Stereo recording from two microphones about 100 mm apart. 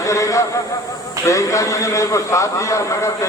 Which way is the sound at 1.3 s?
30° left (ahead or behind).